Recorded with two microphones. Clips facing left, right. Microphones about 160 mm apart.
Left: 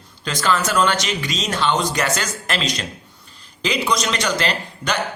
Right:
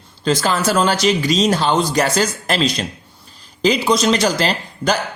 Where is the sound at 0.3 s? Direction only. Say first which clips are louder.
Right 4 dB; 30° right (ahead or behind).